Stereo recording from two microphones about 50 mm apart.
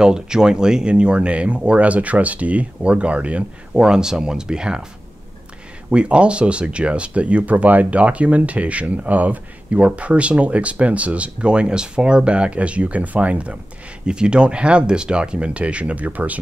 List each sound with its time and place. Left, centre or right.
0.0 s speech: centre
3.7 s speech: centre
5.9 s speech: right